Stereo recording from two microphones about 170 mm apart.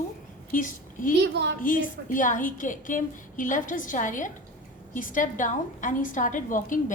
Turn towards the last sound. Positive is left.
turn(degrees=50)  # may be behind; listen again after turning